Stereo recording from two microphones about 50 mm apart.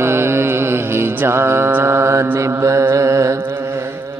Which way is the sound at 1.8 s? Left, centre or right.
Right.